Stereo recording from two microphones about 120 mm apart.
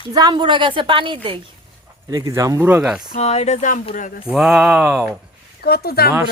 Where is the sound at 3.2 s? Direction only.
65° left (ahead or behind).